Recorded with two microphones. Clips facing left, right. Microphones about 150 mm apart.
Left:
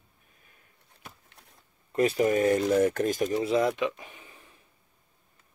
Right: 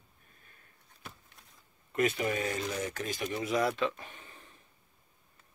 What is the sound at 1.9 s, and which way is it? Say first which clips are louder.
Speech: left 6 dB; 35° left (ahead or behind).